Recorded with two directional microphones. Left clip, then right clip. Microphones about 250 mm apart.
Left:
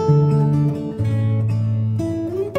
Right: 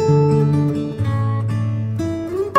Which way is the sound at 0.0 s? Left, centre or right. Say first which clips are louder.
Right 3 dB; centre.